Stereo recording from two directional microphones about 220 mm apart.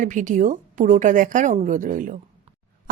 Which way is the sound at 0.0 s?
35° right (ahead or behind).